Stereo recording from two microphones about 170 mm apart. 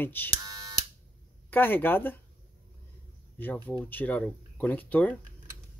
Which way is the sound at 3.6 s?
10° left (ahead or behind).